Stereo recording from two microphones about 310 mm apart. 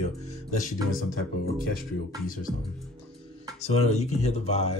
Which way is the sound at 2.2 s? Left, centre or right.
Left.